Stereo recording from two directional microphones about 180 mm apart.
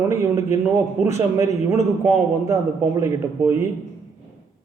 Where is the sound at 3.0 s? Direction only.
15° right (ahead or behind).